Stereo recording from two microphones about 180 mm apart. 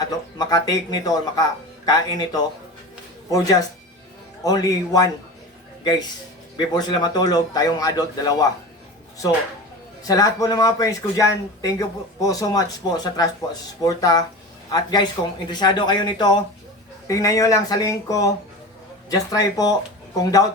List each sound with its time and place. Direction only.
0.0 s speech: 20° left (ahead or behind)
6.6 s speech: 25° left (ahead or behind)
10.0 s speech: 20° left (ahead or behind)